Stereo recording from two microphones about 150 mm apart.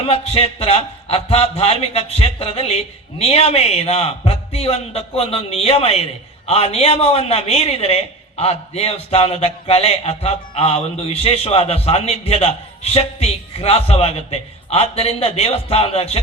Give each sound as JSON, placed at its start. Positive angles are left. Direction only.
{"t": 0.0, "sound": "a man's voice", "side_deg": 40}